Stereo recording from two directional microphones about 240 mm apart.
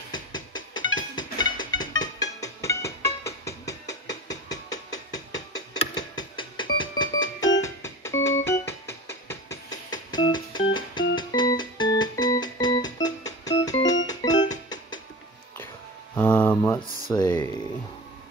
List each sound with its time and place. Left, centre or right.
0.1 s music: centre
16.2 s a sound: centre
17.1 s speech: centre